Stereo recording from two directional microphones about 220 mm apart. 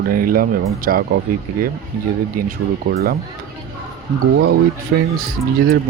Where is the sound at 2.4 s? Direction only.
40° right (ahead or behind).